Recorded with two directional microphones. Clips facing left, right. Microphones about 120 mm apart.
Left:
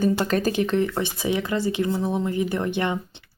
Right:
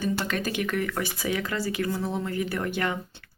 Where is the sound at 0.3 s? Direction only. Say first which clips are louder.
Left 6 dB; 35° left (ahead or behind).